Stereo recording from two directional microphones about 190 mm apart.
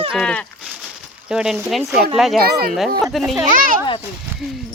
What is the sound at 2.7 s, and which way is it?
Speech, centre (ahead or behind).